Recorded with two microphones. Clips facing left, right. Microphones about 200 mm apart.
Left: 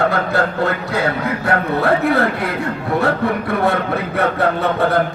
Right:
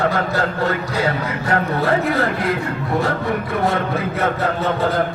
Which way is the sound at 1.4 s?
60° left (ahead or behind).